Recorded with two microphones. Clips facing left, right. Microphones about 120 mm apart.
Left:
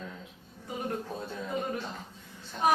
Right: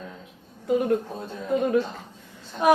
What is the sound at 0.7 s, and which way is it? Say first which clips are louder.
Speech: right 13 dB; 90° right.